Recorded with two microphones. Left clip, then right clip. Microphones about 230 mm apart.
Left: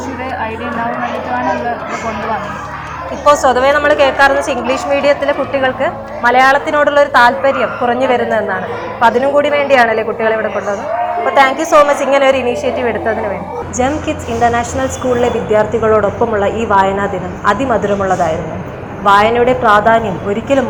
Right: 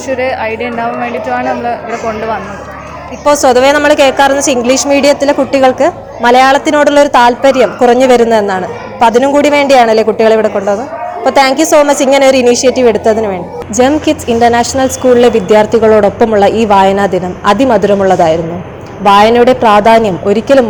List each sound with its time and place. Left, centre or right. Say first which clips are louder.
0.2 s a woman's voice: right 4 dB; right
3.4 s a woman's voice: right 4 dB; right
9.0 s a woman's voice: right 4 dB; right
11.9 s a woman's voice: right 4 dB; right